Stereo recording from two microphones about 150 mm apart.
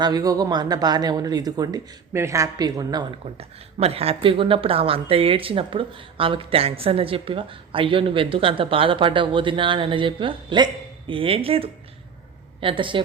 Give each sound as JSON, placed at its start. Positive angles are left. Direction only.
{"t": 0.0, "sound": "speech", "side_deg": -25}
{"t": 3.8, "sound": "a woman's voice", "side_deg": -40}